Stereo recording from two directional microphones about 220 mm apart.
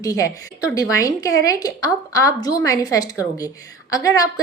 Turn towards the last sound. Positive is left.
turn(degrees=15)  # may be behind; listen again after turning